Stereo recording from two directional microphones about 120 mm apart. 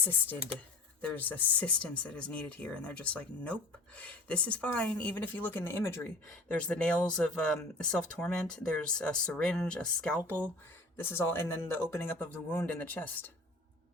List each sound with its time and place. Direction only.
0.0 s speech: 15° left (ahead or behind)
6.5 s speech: 10° left (ahead or behind)